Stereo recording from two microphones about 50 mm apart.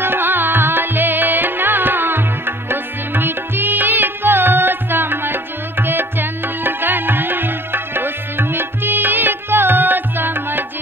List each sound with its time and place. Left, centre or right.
0.0 s music: right